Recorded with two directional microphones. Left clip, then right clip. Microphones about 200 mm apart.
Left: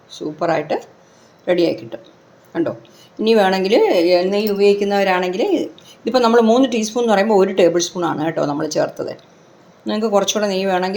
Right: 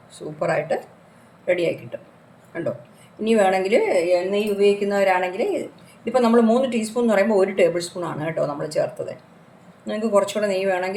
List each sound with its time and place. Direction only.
0.1 s speech: 30° left (ahead or behind)
3.2 s a woman's voice: 40° left (ahead or behind)